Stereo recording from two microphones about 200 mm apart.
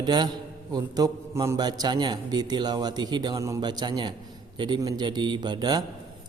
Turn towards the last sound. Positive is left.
turn(degrees=-20)  # may be behind; listen again after turning